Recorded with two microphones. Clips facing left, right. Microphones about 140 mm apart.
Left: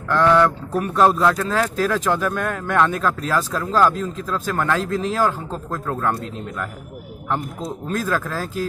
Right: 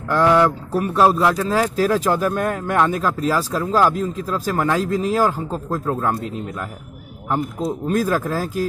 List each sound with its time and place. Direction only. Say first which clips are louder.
0.1 s speech: right 1 dB; 10° right (ahead or behind)
5.7 s speech: right 3 dB; 30° right (ahead or behind)
7.2 s speech: right 4 dB; 5° right (ahead or behind)